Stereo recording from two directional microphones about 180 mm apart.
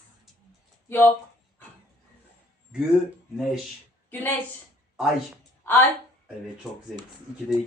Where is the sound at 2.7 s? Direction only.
5° right (ahead or behind).